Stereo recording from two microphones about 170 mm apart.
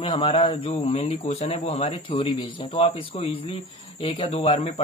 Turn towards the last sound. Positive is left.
turn(degrees=35)  # may be behind; listen again after turning